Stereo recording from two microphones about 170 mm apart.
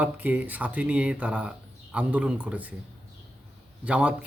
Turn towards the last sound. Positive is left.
turn(degrees=-5)  # may be behind; listen again after turning